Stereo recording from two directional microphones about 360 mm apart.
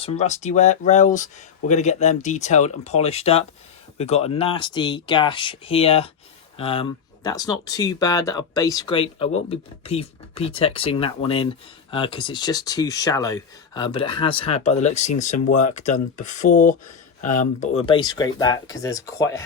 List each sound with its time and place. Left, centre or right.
0.0 s speech: centre